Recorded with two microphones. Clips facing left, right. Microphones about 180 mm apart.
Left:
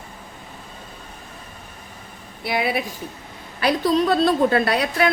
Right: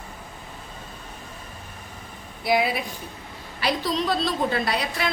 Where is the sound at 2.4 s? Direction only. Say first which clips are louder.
Even; 60° left (ahead or behind).